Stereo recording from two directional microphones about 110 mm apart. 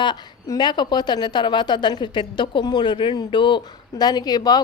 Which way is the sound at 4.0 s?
35° left (ahead or behind).